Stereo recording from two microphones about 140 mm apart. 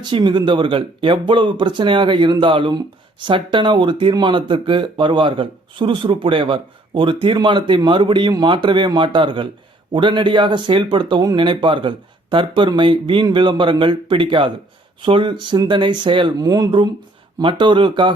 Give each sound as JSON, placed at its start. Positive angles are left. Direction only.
{"t": 0.0, "sound": "speech", "side_deg": -35}